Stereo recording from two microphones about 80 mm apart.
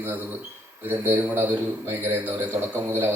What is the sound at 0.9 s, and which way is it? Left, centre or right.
Speech, right.